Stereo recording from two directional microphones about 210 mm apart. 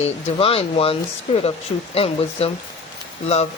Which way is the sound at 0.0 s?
25° left (ahead or behind).